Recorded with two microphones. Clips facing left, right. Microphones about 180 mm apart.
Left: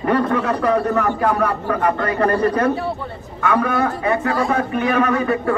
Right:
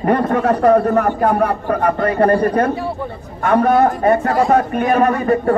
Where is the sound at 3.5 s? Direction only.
45° right (ahead or behind).